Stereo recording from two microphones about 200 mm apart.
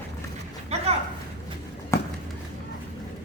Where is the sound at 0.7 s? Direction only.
30° right (ahead or behind).